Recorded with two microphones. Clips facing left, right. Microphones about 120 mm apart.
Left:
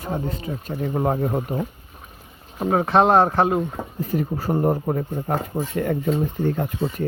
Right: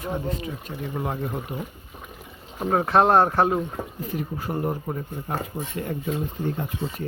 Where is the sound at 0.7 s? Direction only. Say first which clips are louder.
Left 8 dB; 45° left (ahead or behind).